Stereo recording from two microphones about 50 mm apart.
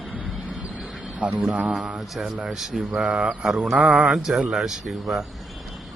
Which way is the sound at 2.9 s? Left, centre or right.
Right.